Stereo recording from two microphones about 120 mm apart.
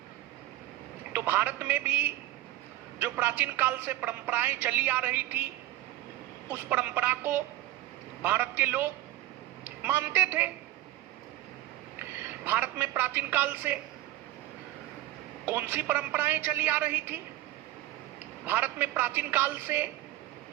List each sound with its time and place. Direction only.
1.1 s a woman's voice: 15° right (ahead or behind)
6.5 s a woman's voice: 15° right (ahead or behind)
12.5 s a woman's voice: 15° right (ahead or behind)
15.4 s a woman's voice: 15° right (ahead or behind)
18.4 s a woman's voice: 15° right (ahead or behind)